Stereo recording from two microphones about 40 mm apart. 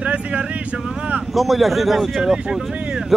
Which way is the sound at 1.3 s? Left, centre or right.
Centre.